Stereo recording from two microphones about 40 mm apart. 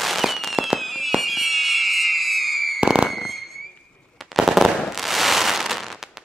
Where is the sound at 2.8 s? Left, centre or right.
Right.